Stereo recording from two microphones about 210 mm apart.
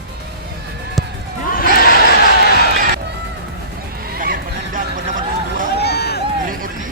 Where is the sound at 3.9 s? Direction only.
45° right (ahead or behind).